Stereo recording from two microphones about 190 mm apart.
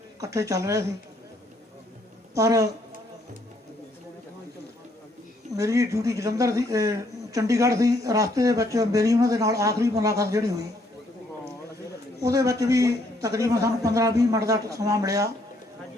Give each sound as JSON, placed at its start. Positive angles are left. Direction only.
{"t": 0.2, "sound": "speech", "side_deg": -15}
{"t": 2.3, "sound": "speech", "side_deg": -15}
{"t": 5.5, "sound": "speech", "side_deg": -15}
{"t": 12.2, "sound": "speech", "side_deg": -15}